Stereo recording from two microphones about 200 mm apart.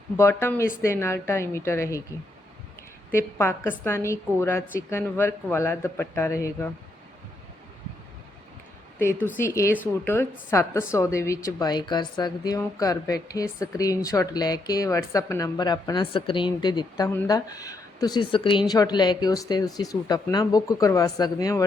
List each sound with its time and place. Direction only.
0.2 s a woman's voice: 10° left (ahead or behind)
3.1 s a woman's voice: 10° left (ahead or behind)
9.0 s a woman's voice: 10° left (ahead or behind)